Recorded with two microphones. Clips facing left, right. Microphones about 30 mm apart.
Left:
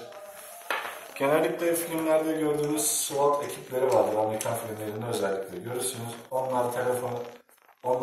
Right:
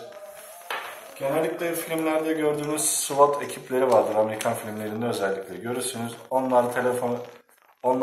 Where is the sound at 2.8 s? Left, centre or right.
Right.